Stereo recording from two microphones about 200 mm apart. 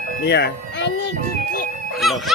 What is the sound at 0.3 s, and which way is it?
Speech, 55° left (ahead or behind).